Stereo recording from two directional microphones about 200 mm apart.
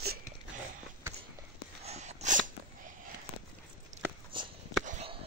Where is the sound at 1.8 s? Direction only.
35° right (ahead or behind).